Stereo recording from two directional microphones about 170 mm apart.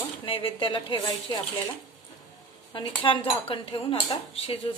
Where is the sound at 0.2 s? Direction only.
30° left (ahead or behind).